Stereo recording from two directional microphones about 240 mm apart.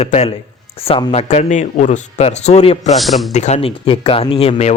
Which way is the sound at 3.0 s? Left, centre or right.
Centre.